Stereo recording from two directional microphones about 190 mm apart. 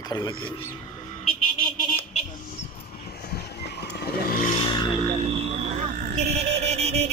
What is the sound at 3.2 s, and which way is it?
Vehicle, 55° left (ahead or behind).